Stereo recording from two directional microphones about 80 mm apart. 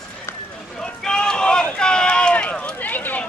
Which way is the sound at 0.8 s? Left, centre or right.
Centre.